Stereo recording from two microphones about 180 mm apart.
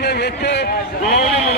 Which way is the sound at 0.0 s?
65° left (ahead or behind).